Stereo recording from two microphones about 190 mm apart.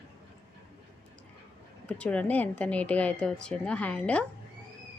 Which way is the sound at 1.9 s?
5° left (ahead or behind).